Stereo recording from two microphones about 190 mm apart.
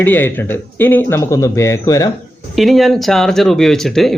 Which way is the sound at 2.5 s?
Centre (ahead or behind).